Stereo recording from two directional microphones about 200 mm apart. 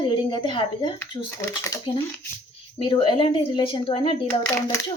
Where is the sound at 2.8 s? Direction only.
25° left (ahead or behind).